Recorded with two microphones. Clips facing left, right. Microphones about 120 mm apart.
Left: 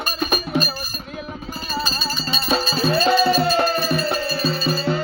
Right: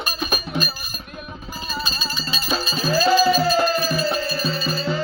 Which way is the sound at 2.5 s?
Centre (ahead or behind).